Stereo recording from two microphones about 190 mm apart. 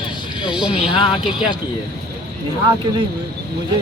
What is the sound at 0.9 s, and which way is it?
Speech, 25° left (ahead or behind).